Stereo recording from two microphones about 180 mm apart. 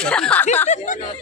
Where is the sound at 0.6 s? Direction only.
40° left (ahead or behind).